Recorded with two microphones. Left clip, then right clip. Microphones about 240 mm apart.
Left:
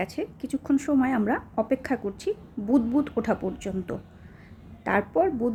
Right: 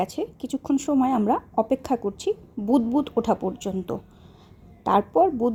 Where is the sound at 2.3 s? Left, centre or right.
Centre.